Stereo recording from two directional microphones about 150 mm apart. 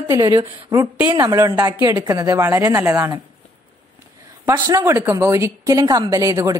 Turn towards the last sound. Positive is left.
turn(degrees=-20)  # may be behind; listen again after turning